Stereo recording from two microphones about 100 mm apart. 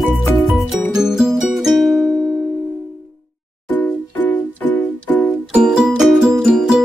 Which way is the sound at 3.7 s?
15° left (ahead or behind).